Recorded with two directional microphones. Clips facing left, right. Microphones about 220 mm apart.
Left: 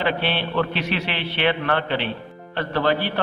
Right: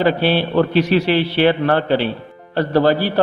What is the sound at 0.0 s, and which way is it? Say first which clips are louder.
A man's voice: right 8 dB; 40° right (ahead or behind).